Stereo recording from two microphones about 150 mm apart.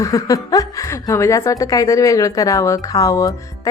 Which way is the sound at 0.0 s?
20° left (ahead or behind).